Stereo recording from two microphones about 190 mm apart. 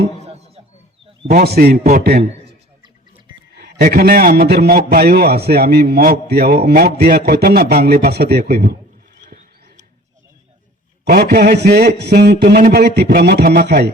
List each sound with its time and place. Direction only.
0.3 s a sound: 30° right (ahead or behind)
1.4 s a man's voice: 55° right (ahead or behind)
1.8 s a man's voice: 35° right (ahead or behind)
3.5 s a man's voice: 50° right (ahead or behind)
9.2 s rodents: 40° right (ahead or behind)
11.1 s a man's voice: 55° right (ahead or behind)